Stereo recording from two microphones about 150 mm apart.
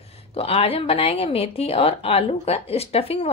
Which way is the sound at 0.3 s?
40° left (ahead or behind).